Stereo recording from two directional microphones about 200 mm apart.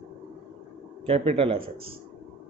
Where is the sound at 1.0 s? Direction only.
30° right (ahead or behind).